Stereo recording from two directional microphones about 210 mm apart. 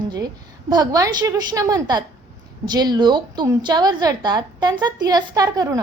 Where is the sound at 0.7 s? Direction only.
20° right (ahead or behind).